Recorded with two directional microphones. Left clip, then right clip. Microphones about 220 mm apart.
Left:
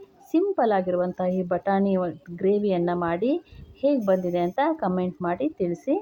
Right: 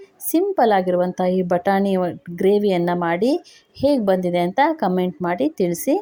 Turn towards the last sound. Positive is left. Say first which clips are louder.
# right 6 dB
turn(degrees=-35)  # may be behind; listen again after turning